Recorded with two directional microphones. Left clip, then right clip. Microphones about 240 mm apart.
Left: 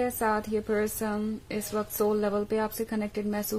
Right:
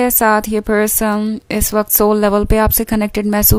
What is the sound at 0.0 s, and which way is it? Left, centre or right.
Speech, right.